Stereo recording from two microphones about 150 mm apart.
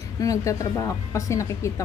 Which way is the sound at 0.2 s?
20° left (ahead or behind).